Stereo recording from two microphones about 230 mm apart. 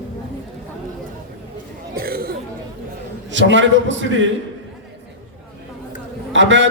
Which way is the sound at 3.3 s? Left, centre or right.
Right.